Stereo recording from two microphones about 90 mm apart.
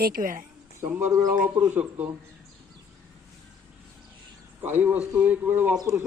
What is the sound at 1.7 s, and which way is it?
Speech, 20° right (ahead or behind).